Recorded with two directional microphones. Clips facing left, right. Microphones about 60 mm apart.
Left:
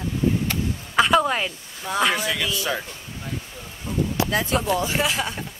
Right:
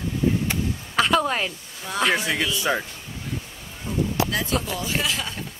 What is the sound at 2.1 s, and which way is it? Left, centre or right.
Speech, right.